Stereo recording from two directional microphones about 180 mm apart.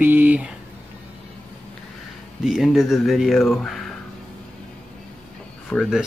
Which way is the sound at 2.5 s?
Centre (ahead or behind).